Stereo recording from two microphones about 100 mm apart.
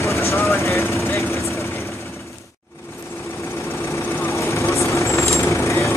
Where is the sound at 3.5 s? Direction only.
30° left (ahead or behind).